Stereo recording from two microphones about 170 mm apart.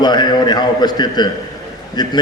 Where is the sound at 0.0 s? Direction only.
25° left (ahead or behind).